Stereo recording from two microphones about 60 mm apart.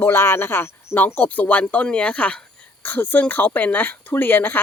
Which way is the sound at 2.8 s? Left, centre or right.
Left.